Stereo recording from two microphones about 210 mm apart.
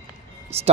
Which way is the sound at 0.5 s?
30° right (ahead or behind).